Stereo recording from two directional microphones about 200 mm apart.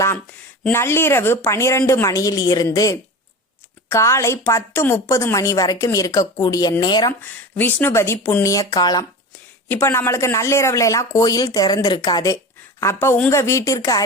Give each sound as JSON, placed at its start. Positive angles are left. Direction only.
{"t": 0.6, "sound": "a woman's voice", "side_deg": 10}
{"t": 7.1, "sound": "a woman's voice", "side_deg": 10}